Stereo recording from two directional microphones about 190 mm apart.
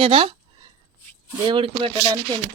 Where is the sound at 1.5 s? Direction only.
25° right (ahead or behind).